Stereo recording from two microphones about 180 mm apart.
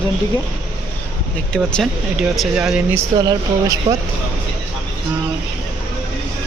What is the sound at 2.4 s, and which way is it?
Speech, 5° right (ahead or behind).